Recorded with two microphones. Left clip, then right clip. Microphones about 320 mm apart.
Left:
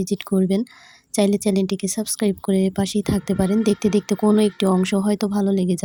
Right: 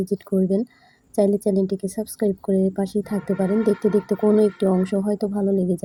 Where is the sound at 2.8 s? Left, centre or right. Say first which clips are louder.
Left 2 dB; left.